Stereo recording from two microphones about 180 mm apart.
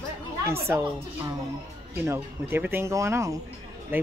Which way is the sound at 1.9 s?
15° right (ahead or behind).